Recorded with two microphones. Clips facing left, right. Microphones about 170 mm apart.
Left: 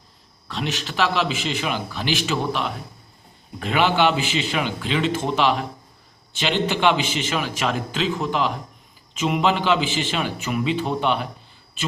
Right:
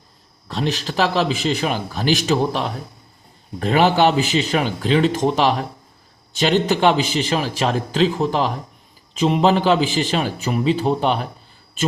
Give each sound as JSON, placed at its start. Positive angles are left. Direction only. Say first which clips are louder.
{"t": 0.4, "sound": "a man's voice", "louder": "right 5 dB", "side_deg": -35}